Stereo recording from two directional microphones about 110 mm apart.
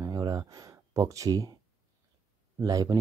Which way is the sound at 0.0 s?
35° right (ahead or behind).